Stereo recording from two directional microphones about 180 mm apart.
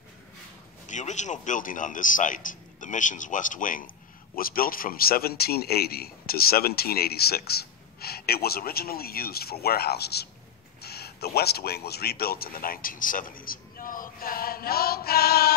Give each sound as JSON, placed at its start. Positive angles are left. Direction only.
{"t": 0.8, "sound": "a man's voice", "side_deg": 40}